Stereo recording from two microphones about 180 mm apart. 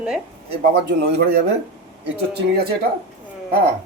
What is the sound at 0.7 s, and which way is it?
Speech, 70° right (ahead or behind).